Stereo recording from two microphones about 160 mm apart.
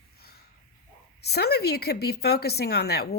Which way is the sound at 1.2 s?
85° left.